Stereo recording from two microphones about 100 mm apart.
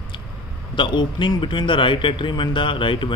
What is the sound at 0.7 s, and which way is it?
A man's voice, 50° left (ahead or behind).